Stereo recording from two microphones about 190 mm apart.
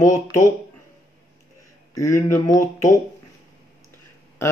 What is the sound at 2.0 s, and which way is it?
Speech, 15° left (ahead or behind).